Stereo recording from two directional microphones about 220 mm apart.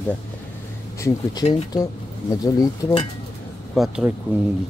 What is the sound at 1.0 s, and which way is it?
Speech, 20° left (ahead or behind).